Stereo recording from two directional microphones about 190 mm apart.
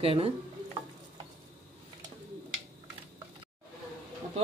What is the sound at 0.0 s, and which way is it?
Speech, 30° right (ahead or behind).